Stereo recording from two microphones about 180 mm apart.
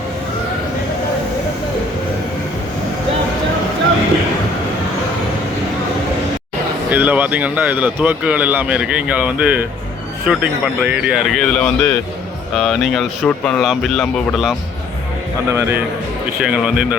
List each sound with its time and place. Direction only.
6.9 s speech: 10° right (ahead or behind)
15.4 s speech: 15° right (ahead or behind)